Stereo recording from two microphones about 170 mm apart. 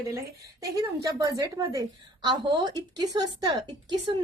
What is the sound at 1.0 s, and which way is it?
A woman's voice, 20° right (ahead or behind).